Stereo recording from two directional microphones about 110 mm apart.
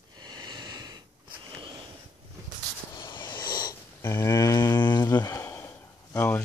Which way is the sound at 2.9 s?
40° left (ahead or behind).